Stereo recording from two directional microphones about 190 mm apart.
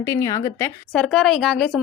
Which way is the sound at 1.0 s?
Centre (ahead or behind).